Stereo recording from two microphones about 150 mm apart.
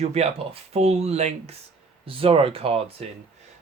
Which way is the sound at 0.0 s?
45° right (ahead or behind).